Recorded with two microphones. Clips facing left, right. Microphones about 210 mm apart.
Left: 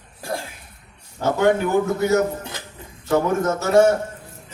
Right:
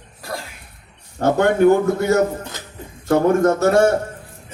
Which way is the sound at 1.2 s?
55° right (ahead or behind).